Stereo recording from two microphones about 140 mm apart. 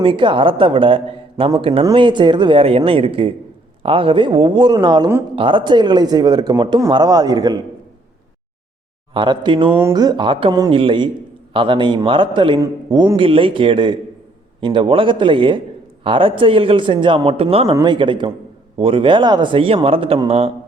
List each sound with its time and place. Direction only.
0.0 s a man's voice: 35° right (ahead or behind)
9.1 s a man's voice: 30° right (ahead or behind)